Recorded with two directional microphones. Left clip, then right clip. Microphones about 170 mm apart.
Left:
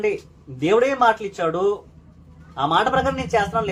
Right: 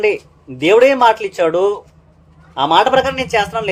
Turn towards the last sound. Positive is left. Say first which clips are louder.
# right 4 dB
turn(degrees=-30)  # may be behind; listen again after turning